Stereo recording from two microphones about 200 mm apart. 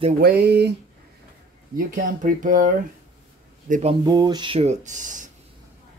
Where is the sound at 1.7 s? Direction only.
40° right (ahead or behind).